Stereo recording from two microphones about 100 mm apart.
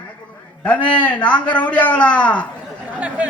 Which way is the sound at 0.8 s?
15° left (ahead or behind).